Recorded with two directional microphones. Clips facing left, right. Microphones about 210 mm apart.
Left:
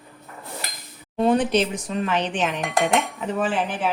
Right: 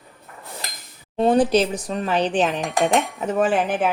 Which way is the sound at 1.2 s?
35° right (ahead or behind).